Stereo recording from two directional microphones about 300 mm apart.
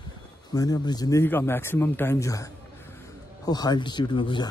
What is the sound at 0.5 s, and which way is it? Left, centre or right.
A man's voice, centre.